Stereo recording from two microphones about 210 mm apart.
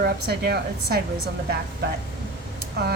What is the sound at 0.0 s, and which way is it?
Speech, 50° right (ahead or behind).